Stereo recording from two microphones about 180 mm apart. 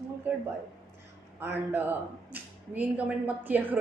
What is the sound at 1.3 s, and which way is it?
A man's voice, 10° right (ahead or behind).